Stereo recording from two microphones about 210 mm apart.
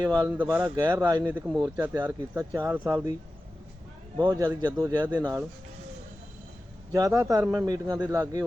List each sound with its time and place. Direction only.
0.0 s speech: 20° right (ahead or behind)
0.3 s a man's voice: 10° right (ahead or behind)
4.2 s a man's voice: 15° right (ahead or behind)
6.9 s a man's voice: 15° right (ahead or behind)